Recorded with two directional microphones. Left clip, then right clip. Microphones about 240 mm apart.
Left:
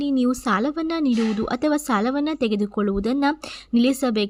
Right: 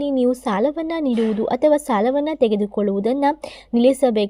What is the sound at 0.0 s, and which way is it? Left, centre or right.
A woman's voice, centre.